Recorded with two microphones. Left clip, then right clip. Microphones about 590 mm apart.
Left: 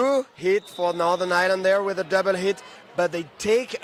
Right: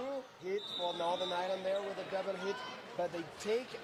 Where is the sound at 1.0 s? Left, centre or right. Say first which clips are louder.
Left 16 dB; left.